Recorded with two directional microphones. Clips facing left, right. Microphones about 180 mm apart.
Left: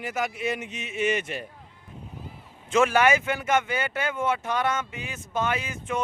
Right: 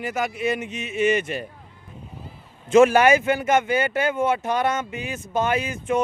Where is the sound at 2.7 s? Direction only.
40° right (ahead or behind).